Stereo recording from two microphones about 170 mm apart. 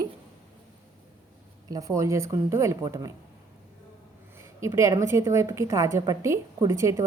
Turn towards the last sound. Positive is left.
turn(degrees=-15)  # may be behind; listen again after turning